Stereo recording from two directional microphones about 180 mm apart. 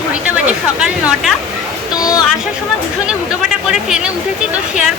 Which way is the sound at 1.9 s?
20° left (ahead or behind).